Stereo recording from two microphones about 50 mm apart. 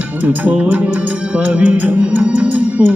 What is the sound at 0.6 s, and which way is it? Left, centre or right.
Music, right.